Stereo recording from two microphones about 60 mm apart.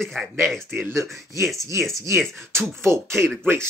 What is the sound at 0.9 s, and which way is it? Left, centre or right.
Speech, right.